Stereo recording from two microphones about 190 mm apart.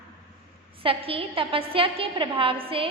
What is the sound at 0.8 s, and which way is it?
A woman's voice, 30° right (ahead or behind).